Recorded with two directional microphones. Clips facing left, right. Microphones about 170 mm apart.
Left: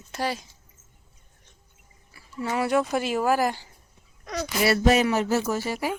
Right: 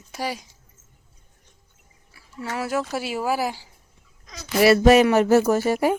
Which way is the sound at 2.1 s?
Centre (ahead or behind).